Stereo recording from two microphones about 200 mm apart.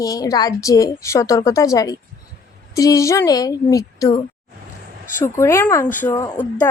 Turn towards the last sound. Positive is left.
turn(degrees=15)  # may be behind; listen again after turning